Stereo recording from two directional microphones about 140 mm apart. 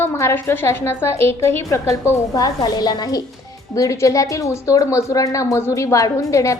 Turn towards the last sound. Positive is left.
turn(degrees=20)  # may be behind; listen again after turning